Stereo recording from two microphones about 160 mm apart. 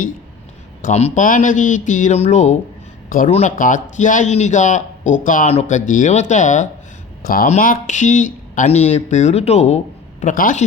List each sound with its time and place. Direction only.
0.8 s speech: 45° left (ahead or behind)
3.5 s speech: 55° left (ahead or behind)